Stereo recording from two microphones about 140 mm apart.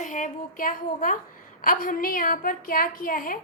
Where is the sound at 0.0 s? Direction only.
70° left (ahead or behind); by 3.3 s 85° left.